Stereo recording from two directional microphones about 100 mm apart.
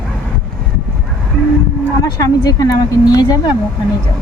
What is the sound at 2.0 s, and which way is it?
Speech, 35° left (ahead or behind).